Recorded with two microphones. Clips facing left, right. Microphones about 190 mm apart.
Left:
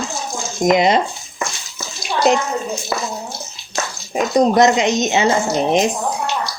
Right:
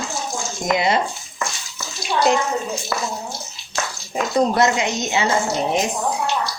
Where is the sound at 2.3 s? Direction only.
20° left (ahead or behind).